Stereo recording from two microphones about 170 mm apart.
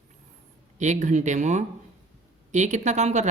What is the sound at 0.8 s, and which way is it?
A man's voice, 45° right (ahead or behind).